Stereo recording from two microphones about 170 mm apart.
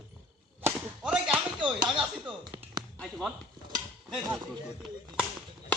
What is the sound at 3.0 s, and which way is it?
Speech, 5° left (ahead or behind).